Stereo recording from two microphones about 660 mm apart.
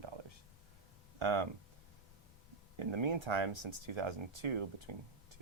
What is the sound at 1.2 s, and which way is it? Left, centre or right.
Speech, right.